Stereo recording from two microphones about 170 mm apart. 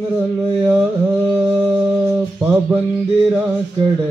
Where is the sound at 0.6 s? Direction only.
5° right (ahead or behind).